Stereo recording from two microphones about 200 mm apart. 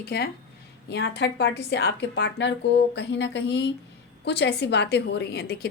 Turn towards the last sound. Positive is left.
turn(degrees=55)  # may be behind; listen again after turning